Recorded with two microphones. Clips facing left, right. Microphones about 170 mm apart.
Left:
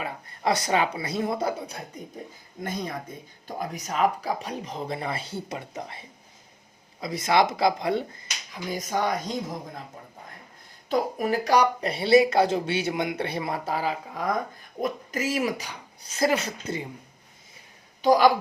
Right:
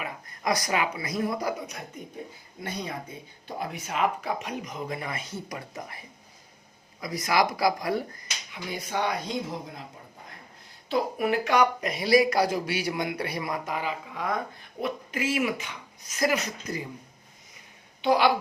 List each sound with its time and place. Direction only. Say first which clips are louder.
0.0 s speech: left 4 dB; 30° left (ahead or behind)
2.6 s speech: left 2 dB; 45° left (ahead or behind); by 8.2 s 25° left (ahead or behind)
8.5 s speech: left 3 dB; 40° left (ahead or behind)
10.8 s speech: left 1 dB; 40° left (ahead or behind)
18.0 s a woman's voice: left 4 dB; 40° left (ahead or behind)